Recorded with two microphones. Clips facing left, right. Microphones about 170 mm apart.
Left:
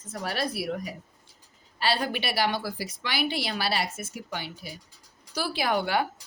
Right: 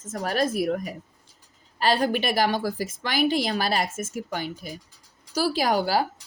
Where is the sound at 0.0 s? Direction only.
45° right (ahead or behind).